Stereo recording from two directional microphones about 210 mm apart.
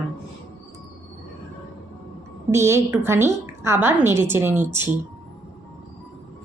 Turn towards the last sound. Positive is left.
turn(degrees=-10)  # may be behind; listen again after turning